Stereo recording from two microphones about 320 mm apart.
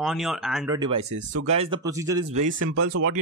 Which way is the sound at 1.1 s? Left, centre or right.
Right.